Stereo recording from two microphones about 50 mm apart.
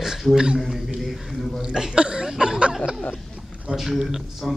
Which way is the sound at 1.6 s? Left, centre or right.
Centre.